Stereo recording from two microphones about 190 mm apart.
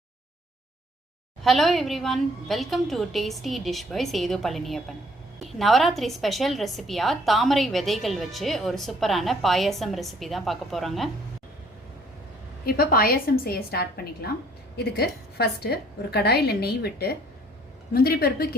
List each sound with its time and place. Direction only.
1.5 s a woman's voice: centre (ahead or behind)
12.6 s a woman's voice: 50° left (ahead or behind)